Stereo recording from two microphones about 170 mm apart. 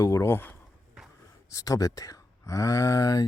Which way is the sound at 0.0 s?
15° left (ahead or behind).